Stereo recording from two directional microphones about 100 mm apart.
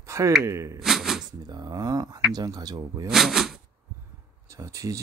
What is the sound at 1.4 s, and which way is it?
Speech, 45° right (ahead or behind).